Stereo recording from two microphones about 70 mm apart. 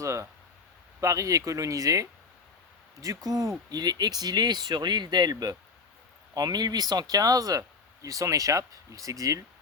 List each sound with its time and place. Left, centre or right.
0.0 s speech: right